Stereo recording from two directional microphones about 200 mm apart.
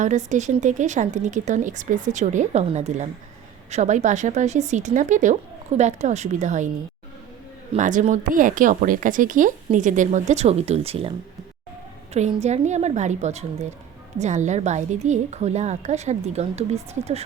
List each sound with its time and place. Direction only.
0.0 s speech: 35° right (ahead or behind)
7.7 s speech: 40° right (ahead or behind)
12.1 s speech: 35° right (ahead or behind)